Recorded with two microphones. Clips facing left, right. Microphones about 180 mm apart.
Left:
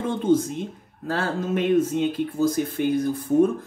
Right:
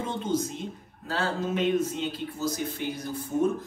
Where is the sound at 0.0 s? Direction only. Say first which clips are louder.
Left 8 dB; 50° left (ahead or behind).